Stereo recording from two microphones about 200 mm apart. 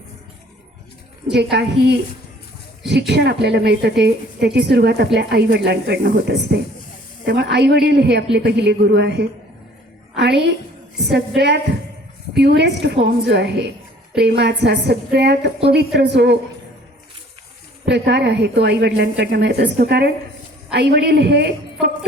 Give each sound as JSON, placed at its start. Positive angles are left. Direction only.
{"t": 1.3, "sound": "a woman's voice", "side_deg": -60}
{"t": 3.1, "sound": "a woman's voice", "side_deg": -55}
{"t": 17.8, "sound": "a woman's voice", "side_deg": -55}